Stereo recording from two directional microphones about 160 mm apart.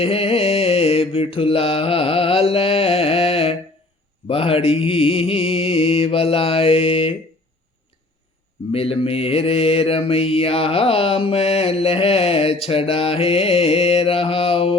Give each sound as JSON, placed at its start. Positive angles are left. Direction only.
{"t": 0.0, "sound": "mantra", "side_deg": 35}
{"t": 8.7, "sound": "mantra", "side_deg": 35}